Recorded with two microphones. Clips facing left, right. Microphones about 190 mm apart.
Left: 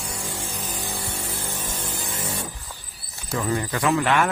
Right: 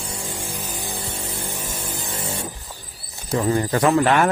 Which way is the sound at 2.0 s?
30° right (ahead or behind).